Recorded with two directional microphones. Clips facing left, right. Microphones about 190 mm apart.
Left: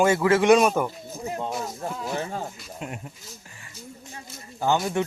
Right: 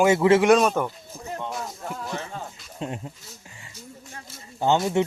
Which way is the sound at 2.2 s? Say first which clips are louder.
Left 4 dB; 35° left (ahead or behind).